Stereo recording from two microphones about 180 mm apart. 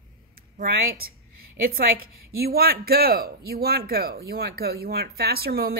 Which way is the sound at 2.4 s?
60° right (ahead or behind).